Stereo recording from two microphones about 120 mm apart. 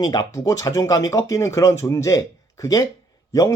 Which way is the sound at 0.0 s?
35° left (ahead or behind).